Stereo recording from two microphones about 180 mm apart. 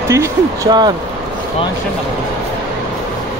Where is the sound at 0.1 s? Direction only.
20° right (ahead or behind).